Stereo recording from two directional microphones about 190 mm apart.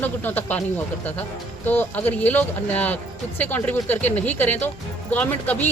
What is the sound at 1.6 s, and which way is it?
Speech, 10° left (ahead or behind).